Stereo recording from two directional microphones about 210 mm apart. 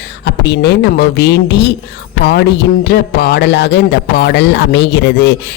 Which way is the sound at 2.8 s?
50° left (ahead or behind).